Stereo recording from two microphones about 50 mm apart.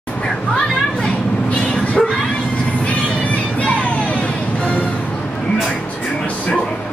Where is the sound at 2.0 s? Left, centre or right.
Centre.